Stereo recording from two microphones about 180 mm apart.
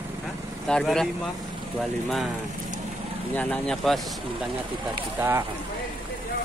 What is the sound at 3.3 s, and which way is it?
Speech, 5° left (ahead or behind).